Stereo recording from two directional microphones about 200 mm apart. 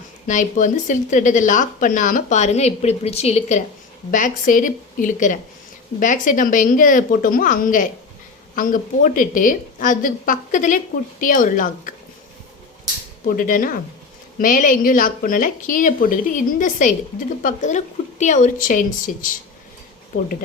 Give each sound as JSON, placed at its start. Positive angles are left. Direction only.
{"t": 0.3, "sound": "a woman's voice", "side_deg": 40}
{"t": 13.2, "sound": "a woman's voice", "side_deg": 45}